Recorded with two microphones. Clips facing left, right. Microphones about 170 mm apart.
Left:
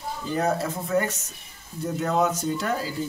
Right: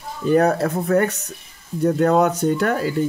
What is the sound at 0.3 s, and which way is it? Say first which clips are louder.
Speech: right 9 dB; 65° right (ahead or behind).